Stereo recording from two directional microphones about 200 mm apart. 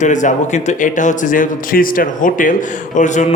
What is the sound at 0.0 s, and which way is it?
A man's voice, 40° left (ahead or behind).